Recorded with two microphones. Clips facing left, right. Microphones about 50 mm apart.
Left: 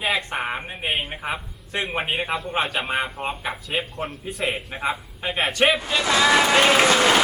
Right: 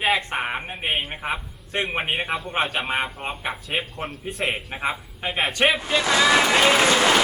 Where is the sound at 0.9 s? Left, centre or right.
Centre.